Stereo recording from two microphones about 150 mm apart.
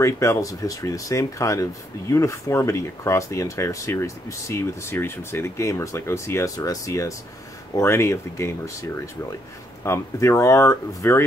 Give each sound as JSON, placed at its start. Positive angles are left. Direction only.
{"t": 0.0, "sound": "speech", "side_deg": 20}
{"t": 9.8, "sound": "speech", "side_deg": 20}